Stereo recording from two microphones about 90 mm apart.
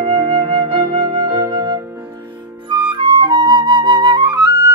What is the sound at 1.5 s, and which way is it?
Flute, 45° right (ahead or behind).